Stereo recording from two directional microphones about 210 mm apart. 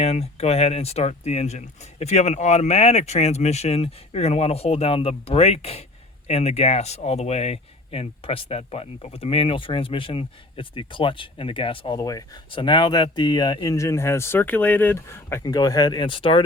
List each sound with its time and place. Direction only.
0.0 s speech: 30° left (ahead or behind)